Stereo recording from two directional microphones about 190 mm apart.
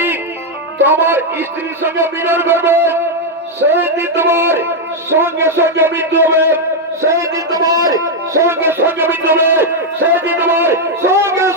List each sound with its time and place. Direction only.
0.8 s a man's voice: 10° right (ahead or behind)